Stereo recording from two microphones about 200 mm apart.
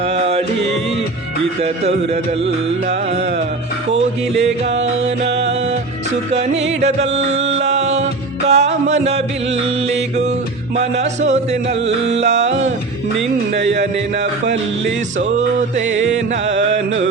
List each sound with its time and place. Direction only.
0.0 s music: 30° right (ahead or behind)
2.4 s music: 30° right (ahead or behind)
6.3 s music: 30° right (ahead or behind)
13.5 s a man's voice: 60° right (ahead or behind)
14.4 s music: 35° right (ahead or behind)